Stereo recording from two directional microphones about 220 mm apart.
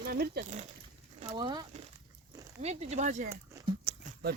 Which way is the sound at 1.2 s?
25° right (ahead or behind).